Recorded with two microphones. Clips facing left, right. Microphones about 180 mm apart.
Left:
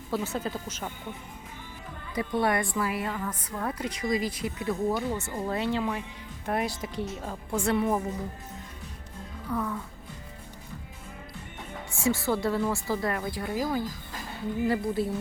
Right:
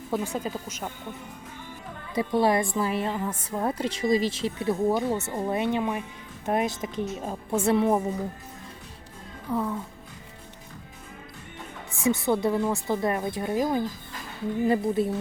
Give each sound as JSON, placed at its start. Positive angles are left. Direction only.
{"t": 0.1, "sound": "speech", "side_deg": -15}
{"t": 2.1, "sound": "a woman's voice", "side_deg": -25}
{"t": 9.5, "sound": "a woman's voice", "side_deg": -20}
{"t": 12.0, "sound": "a woman's voice", "side_deg": -20}